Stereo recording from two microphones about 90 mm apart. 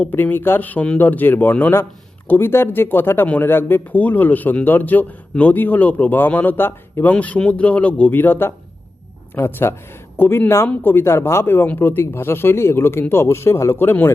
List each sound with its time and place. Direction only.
0.1 s a man's voice: 20° left (ahead or behind)
7.1 s a man's voice: 15° left (ahead or behind)